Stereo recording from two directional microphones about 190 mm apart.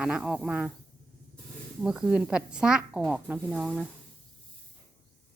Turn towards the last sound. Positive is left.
turn(degrees=-5)  # may be behind; listen again after turning